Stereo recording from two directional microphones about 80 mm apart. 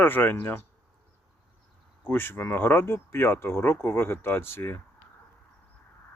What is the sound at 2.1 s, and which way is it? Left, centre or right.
Speech, left.